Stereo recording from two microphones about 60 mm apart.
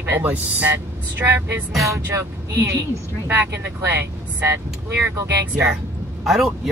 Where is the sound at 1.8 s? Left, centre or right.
Right.